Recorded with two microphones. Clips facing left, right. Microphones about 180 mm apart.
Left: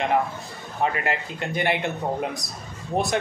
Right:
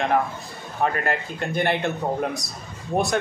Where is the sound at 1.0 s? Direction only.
15° left (ahead or behind).